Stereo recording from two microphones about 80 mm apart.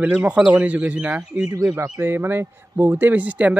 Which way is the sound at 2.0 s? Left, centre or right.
Right.